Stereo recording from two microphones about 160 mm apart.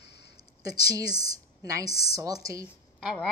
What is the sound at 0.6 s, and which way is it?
A woman's voice, 25° right (ahead or behind).